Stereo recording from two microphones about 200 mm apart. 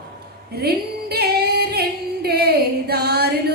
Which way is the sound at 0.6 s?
50° right (ahead or behind).